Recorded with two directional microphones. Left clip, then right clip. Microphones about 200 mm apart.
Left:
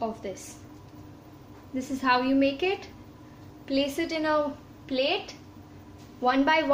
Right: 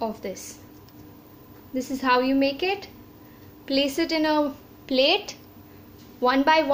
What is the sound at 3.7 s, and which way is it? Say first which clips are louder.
A woman's voice: right 4 dB; 40° right (ahead or behind).